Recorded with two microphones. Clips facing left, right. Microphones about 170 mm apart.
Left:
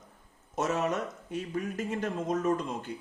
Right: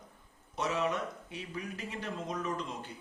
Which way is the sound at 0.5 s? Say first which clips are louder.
Left 3 dB; 45° left (ahead or behind).